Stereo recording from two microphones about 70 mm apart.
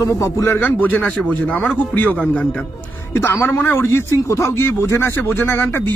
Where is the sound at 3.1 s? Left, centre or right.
Left.